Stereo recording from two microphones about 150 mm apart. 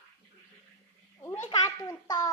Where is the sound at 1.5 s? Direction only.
25° left (ahead or behind).